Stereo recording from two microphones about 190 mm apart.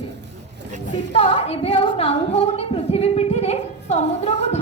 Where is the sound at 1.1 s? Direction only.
30° left (ahead or behind).